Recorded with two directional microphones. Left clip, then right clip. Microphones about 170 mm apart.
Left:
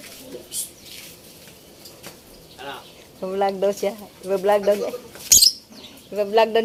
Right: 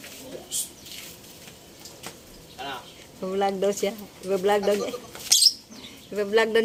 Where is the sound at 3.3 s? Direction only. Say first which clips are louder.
Left 3 dB; 20° right (ahead or behind).